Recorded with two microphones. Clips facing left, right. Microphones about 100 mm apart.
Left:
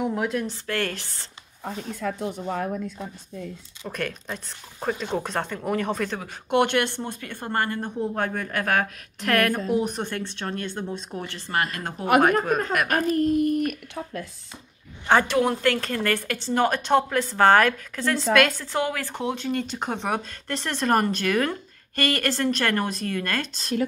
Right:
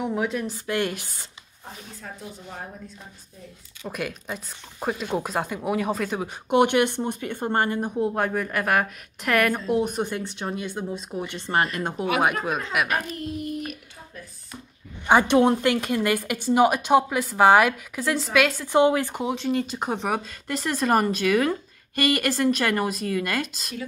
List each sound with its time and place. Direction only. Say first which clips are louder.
0.0 s speech: left 1 dB; centre (ahead or behind)
0.7 s a woman's voice: right 2 dB; 15° right (ahead or behind)
1.6 s speech: left 11 dB; 80° left
3.8 s a woman's voice: even; 5° right (ahead or behind)
8.2 s a woman's voice: right 2 dB; 5° right (ahead or behind)
11.2 s a woman's voice: right 3 dB; 20° right (ahead or behind)
12.8 s a child's voice: left 6 dB; 45° left (ahead or behind)
13.7 s speech: left 8 dB; 70° left (ahead or behind)
15.0 s a woman's voice: right 3 dB; 15° right (ahead or behind)
18.7 s a woman's voice: right 7 dB; 20° right (ahead or behind)
19.1 s speech: right 2 dB; centre (ahead or behind)